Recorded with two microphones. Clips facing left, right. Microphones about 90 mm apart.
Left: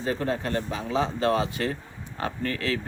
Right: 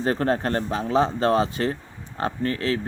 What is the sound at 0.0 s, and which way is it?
Speech, 55° right (ahead or behind).